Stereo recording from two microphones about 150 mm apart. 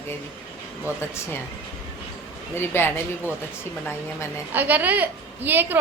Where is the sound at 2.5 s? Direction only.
15° left (ahead or behind).